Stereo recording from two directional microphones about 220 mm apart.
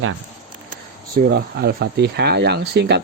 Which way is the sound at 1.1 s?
45° right (ahead or behind).